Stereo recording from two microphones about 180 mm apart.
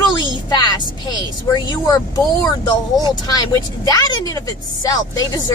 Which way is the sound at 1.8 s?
20° left (ahead or behind).